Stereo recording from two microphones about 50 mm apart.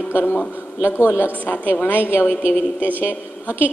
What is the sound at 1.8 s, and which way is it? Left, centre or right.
A woman's voice, left.